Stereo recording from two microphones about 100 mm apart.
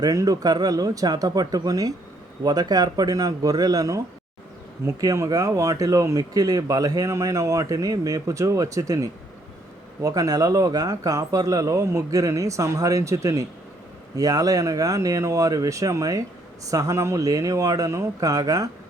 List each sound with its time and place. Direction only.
0.0 s speech: 35° right (ahead or behind)